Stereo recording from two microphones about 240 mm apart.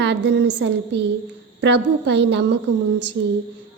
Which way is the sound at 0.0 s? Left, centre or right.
Right.